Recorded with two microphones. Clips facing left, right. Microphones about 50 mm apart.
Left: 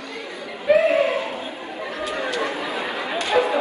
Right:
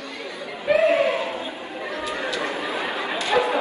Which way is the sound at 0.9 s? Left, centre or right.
Right.